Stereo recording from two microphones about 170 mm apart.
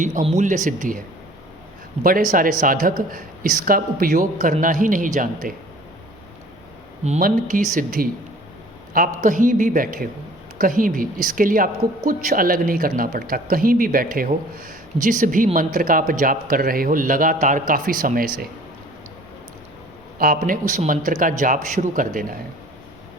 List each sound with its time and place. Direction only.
0.0 s a man's voice: 45° right (ahead or behind)
2.0 s a woman's voice: 55° right (ahead or behind)
7.2 s a woman's voice: 55° right (ahead or behind)
20.1 s a man's voice: 55° right (ahead or behind)